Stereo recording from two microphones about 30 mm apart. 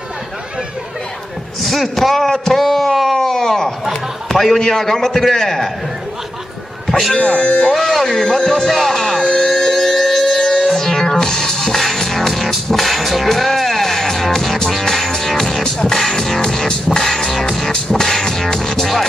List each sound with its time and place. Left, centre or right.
2.0 s a man's voice: centre
3.1 s a sound: centre
3.9 s a man's voice: centre
6.9 s speech: centre
7.2 s speech: left
7.7 s a man's voice: centre
8.9 s music: centre
9.2 s a sound: left
9.6 s civil defense siren: centre
10.4 s music: centre
11.7 s music: centre